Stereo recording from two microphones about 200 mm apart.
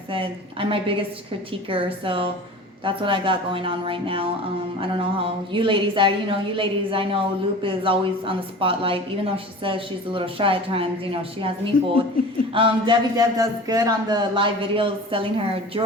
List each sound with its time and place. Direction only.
0.1 s a woman's voice: 25° right (ahead or behind)